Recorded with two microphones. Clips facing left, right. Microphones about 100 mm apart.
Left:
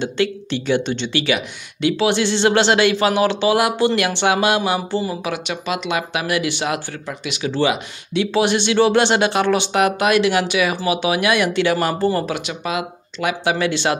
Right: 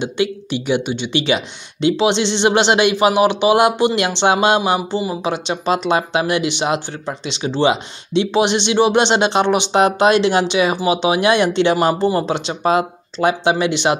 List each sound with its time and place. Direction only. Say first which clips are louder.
0.0 s speech: right 1 dB; 15° right (ahead or behind)
1.2 s speech: right 2 dB; 25° right (ahead or behind)